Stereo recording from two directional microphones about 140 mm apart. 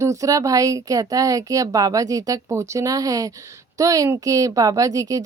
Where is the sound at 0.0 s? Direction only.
25° right (ahead or behind).